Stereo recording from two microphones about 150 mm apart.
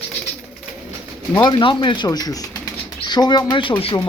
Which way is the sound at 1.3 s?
35° left (ahead or behind).